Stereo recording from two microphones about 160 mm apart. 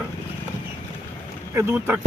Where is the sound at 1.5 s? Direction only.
15° right (ahead or behind).